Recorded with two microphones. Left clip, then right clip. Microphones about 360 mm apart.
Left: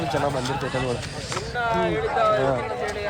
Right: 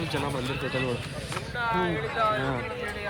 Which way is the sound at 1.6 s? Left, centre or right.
Centre.